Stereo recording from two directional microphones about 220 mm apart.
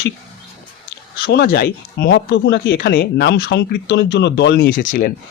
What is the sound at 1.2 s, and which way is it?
Speech, 45° left (ahead or behind).